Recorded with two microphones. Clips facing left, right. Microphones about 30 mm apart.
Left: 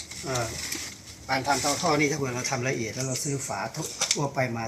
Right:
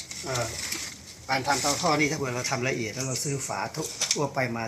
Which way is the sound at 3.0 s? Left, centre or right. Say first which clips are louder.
Even; right.